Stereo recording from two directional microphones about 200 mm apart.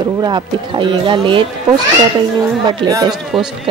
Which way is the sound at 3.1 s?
Centre (ahead or behind).